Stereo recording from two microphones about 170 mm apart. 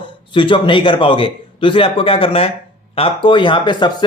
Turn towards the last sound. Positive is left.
turn(degrees=25)  # may be behind; listen again after turning